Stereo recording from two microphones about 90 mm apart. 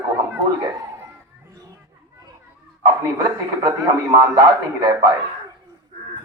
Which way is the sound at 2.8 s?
45° right (ahead or behind).